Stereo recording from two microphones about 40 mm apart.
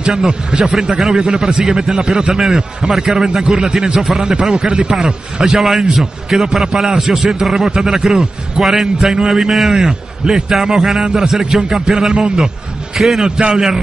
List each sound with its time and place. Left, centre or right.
0.0 s a man's voice: centre
2.3 s a man's voice: centre
4.0 s a man's voice: centre
4.6 s a man's voice: right
5.0 s a man's voice: centre
12.1 s a man's voice: centre
12.9 s a man's voice: centre